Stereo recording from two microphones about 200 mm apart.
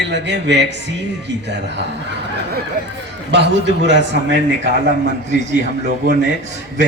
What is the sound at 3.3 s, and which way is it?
A man's voice, 60° right (ahead or behind).